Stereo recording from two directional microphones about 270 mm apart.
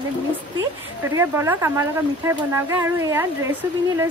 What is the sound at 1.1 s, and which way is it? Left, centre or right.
Speech, centre.